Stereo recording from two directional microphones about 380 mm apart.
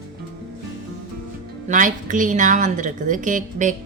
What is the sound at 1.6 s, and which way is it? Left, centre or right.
A woman's voice, centre.